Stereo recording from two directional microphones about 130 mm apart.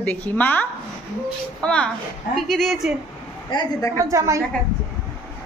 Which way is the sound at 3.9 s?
25° right (ahead or behind).